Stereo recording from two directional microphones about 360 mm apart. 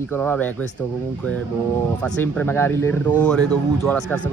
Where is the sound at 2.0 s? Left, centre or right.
Centre.